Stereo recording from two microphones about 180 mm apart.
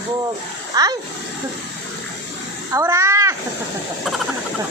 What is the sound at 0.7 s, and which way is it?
Speech, 20° right (ahead or behind).